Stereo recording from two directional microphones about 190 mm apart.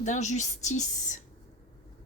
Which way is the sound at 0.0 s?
40° left (ahead or behind).